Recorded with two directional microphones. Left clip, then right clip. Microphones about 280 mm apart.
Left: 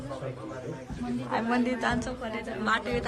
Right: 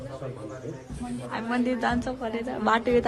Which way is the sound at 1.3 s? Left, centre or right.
Centre.